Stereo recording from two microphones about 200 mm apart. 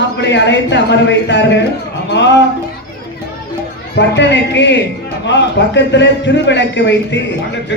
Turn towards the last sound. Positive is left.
turn(degrees=60)  # may be behind; listen again after turning